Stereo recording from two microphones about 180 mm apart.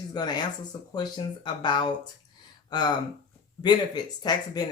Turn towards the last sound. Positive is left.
turn(degrees=20)  # may be behind; listen again after turning